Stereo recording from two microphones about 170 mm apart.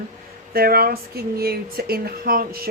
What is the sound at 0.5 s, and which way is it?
Speech, 60° right (ahead or behind).